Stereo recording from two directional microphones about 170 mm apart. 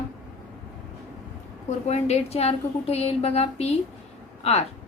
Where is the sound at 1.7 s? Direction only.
40° left (ahead or behind).